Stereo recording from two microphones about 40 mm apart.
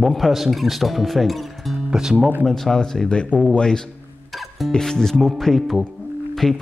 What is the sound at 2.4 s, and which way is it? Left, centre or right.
A man's voice, centre.